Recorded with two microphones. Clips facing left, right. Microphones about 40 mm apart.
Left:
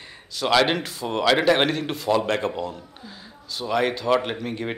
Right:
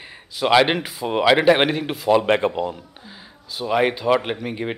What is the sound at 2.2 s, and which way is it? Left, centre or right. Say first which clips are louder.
Speech: right 5 dB; right.